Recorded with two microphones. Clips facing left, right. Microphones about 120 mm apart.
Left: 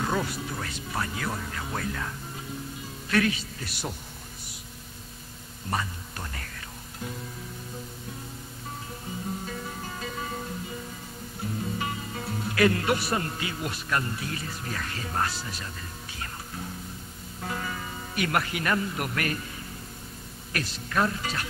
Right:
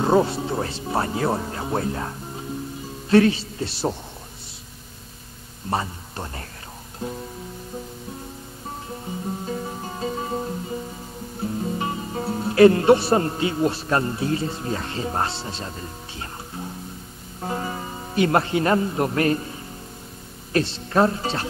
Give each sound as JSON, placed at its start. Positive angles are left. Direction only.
{"t": 0.0, "sound": "a man's voice", "side_deg": -30}
{"t": 5.7, "sound": "speech", "side_deg": -30}
{"t": 9.5, "sound": "music", "side_deg": -30}
{"t": 11.6, "sound": "speech", "side_deg": -30}
{"t": 20.5, "sound": "speech", "side_deg": -30}